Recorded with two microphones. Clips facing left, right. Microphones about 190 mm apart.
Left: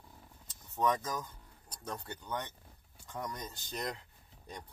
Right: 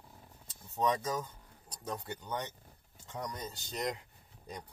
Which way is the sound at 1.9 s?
15° right (ahead or behind).